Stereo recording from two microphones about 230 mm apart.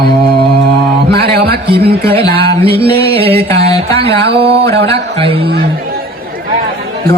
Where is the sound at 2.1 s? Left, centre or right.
Centre.